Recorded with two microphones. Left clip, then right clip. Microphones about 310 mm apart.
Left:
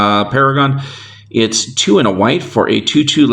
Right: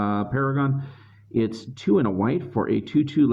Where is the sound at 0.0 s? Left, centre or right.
Right.